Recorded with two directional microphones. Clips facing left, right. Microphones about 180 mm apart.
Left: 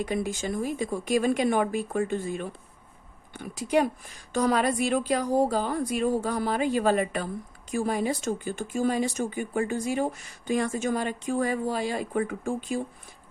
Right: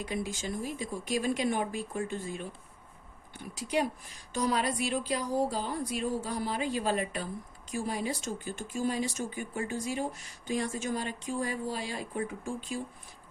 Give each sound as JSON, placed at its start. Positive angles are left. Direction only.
{"t": 0.0, "sound": "speech", "side_deg": 55}
{"t": 3.3, "sound": "speech", "side_deg": 50}
{"t": 9.6, "sound": "speech", "side_deg": 55}